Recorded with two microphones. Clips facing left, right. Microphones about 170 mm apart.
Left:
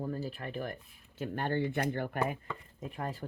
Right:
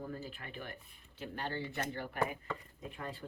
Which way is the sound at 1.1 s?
50° left (ahead or behind).